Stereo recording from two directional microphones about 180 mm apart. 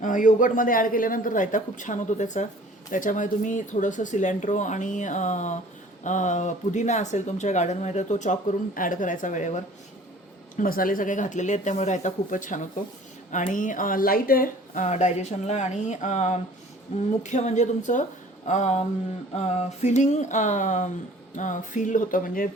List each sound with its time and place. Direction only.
0.0 s speech: 45° left (ahead or behind)
10.6 s speech: 50° left (ahead or behind)